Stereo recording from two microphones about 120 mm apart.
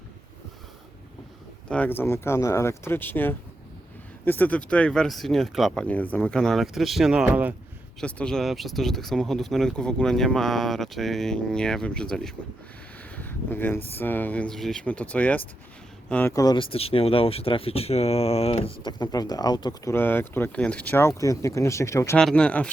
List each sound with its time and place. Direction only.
1.7 s speech: 15° left (ahead or behind)
5.8 s speech: 10° left (ahead or behind); by 7.5 s 15° right (ahead or behind)
8.0 s speech: 5° left (ahead or behind)
13.1 s speech: 15° left (ahead or behind)
16.3 s speech: 30° left (ahead or behind)
16.6 s speech: 50° left (ahead or behind)
18.8 s speech: 40° left (ahead or behind)
19.9 s speech: 20° left (ahead or behind)
21.2 s speech: 25° left (ahead or behind)
22.2 s speech: 5° left (ahead or behind)